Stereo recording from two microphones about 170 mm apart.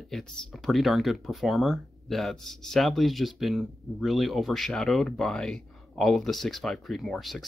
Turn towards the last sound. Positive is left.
turn(degrees=0)  # may be behind; listen again after turning